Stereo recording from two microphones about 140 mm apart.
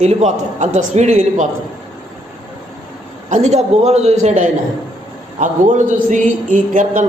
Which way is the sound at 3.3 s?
55° right (ahead or behind).